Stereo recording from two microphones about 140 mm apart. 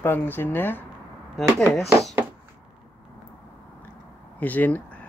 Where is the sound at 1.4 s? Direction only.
Centre (ahead or behind).